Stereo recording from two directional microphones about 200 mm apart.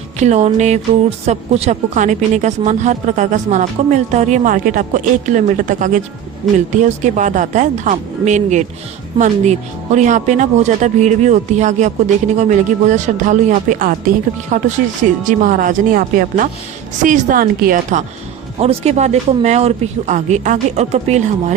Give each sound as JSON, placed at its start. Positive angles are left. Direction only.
{"t": 0.2, "sound": "speech", "side_deg": -35}
{"t": 18.6, "sound": "speech", "side_deg": -30}